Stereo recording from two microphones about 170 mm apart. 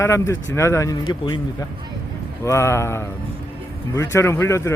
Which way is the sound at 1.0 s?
30° left (ahead or behind).